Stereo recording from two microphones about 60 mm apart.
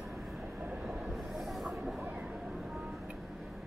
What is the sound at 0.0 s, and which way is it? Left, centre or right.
Train, centre.